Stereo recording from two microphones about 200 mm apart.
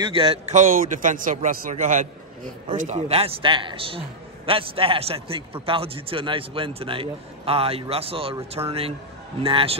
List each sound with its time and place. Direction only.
0.0 s a man's voice: 25° right (ahead or behind)